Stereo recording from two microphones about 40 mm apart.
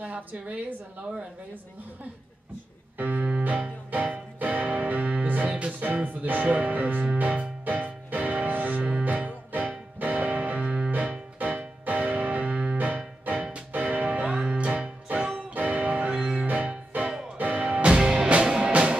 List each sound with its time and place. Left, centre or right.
0.0 s a woman's voice: right
3.0 s music: right
5.5 s music: right
7.2 s music: right
7.6 s music: right
15.5 s music: right
16.2 s music: right
16.9 s music: right
17.8 s music: right